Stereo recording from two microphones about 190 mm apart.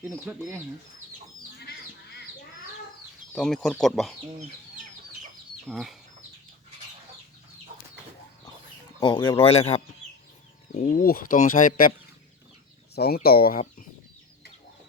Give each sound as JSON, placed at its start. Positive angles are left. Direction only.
{"t": 0.3, "sound": "speech", "side_deg": -5}
{"t": 3.3, "sound": "speech", "side_deg": 0}
{"t": 5.6, "sound": "speech", "side_deg": 0}
{"t": 9.0, "sound": "speech", "side_deg": 20}
{"t": 9.5, "sound": "speech", "side_deg": 35}
{"t": 10.8, "sound": "speech", "side_deg": 45}
{"t": 13.2, "sound": "speech", "side_deg": 55}